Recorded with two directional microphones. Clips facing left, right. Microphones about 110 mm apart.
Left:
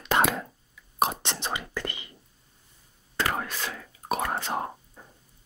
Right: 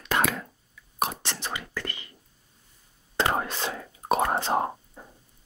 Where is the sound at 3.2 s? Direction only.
25° right (ahead or behind).